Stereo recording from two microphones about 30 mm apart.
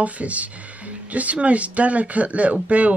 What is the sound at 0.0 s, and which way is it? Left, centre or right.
Speech, right.